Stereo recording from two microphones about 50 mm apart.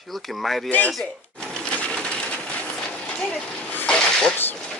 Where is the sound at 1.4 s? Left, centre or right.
Centre.